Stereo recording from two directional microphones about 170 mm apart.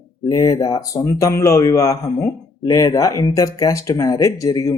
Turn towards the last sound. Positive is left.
turn(degrees=20)  # may be behind; listen again after turning